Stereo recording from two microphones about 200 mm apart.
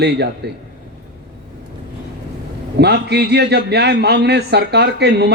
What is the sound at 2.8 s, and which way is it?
Speech, 55° right (ahead or behind).